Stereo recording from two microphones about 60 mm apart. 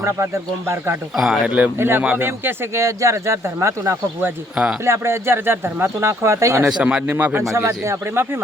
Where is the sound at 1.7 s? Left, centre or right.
Right.